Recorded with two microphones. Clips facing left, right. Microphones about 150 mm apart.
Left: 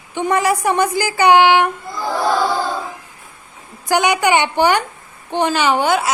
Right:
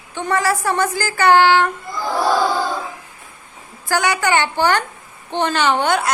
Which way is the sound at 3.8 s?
20° left (ahead or behind).